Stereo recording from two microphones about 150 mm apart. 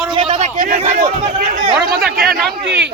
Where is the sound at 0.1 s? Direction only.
40° right (ahead or behind).